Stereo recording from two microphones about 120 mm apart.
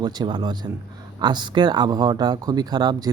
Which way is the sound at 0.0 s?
40° right (ahead or behind).